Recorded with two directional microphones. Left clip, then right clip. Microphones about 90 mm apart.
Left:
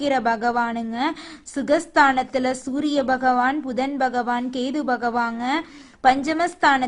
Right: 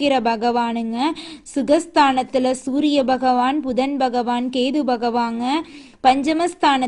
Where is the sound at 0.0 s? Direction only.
35° right (ahead or behind).